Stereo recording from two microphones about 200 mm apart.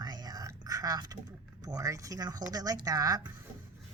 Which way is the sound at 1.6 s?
15° right (ahead or behind).